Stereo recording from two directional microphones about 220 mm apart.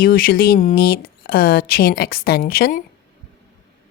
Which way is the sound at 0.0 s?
40° left (ahead or behind).